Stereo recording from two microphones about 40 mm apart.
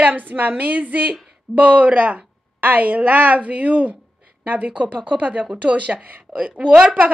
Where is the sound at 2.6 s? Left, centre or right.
Right.